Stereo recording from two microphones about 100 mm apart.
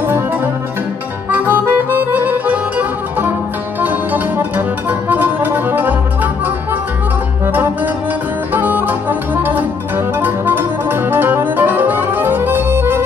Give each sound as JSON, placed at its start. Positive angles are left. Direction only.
{"t": 1.3, "sound": "music", "side_deg": -20}
{"t": 8.5, "sound": "music", "side_deg": -20}